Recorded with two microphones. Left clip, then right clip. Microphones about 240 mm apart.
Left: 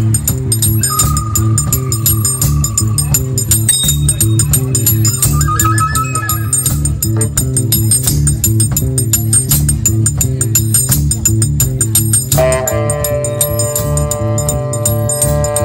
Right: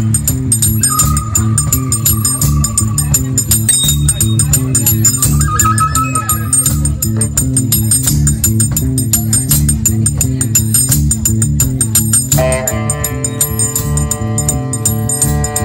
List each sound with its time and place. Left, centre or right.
5.4 s music: centre
12.4 s music: left